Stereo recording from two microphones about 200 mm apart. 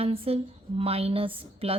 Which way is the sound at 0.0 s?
30° right (ahead or behind).